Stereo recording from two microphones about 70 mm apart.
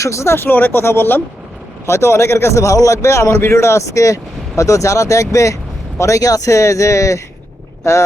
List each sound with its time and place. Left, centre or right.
0.0 s speech: left
1.9 s a man's voice: left